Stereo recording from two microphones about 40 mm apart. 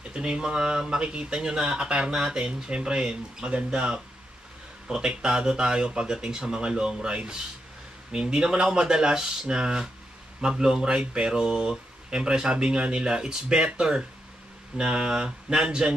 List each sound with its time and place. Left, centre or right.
0.1 s speech: right